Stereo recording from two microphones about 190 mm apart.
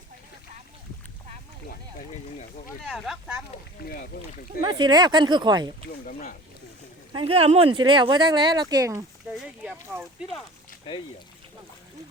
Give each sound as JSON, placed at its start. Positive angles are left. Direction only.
{"t": 2.8, "sound": "speech", "side_deg": 0}
{"t": 3.8, "sound": "speech", "side_deg": 55}
{"t": 4.6, "sound": "speech", "side_deg": -25}
{"t": 6.1, "sound": "speech", "side_deg": 45}
{"t": 7.1, "sound": "speech", "side_deg": -25}
{"t": 9.3, "sound": "speech", "side_deg": -5}